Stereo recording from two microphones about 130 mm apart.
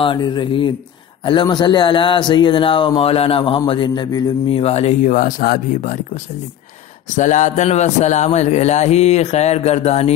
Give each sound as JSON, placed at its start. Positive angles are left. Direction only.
{"t": 0.0, "sound": "a man's voice", "side_deg": 35}
{"t": 4.5, "sound": "speech", "side_deg": 50}
{"t": 7.2, "sound": "a man's voice", "side_deg": 70}